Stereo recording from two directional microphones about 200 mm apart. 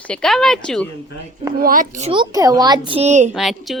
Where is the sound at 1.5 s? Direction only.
45° right (ahead or behind).